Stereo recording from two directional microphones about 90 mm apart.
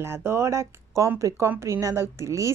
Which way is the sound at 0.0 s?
30° right (ahead or behind).